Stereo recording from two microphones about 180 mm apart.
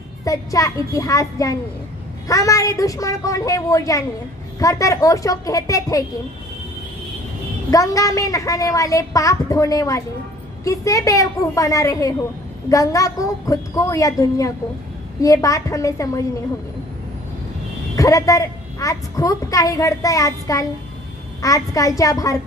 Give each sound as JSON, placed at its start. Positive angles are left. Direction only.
{"t": 0.2, "sound": "a woman's voice", "side_deg": 20}
{"t": 7.7, "sound": "a woman's voice", "side_deg": 20}
{"t": 17.9, "sound": "a woman's voice", "side_deg": 20}